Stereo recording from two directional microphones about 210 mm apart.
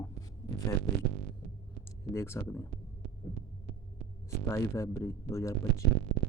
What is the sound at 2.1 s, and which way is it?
Speech, 10° left (ahead or behind).